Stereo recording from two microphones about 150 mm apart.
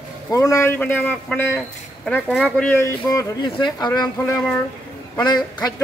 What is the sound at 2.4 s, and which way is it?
Speech, 10° left (ahead or behind).